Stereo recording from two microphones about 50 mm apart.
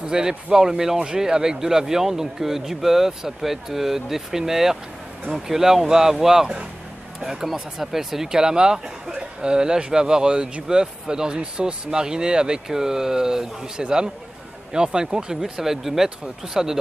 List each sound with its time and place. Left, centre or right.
0.0 s speech: centre